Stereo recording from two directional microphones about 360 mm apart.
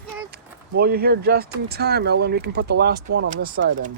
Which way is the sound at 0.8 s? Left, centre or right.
Right.